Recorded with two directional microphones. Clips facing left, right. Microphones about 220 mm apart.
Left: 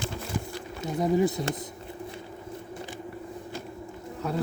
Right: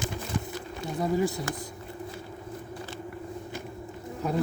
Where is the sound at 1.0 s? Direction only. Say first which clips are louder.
Left 3 dB; 20° left (ahead or behind).